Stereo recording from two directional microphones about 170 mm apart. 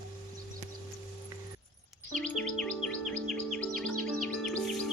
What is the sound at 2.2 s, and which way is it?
Music, 5° left (ahead or behind).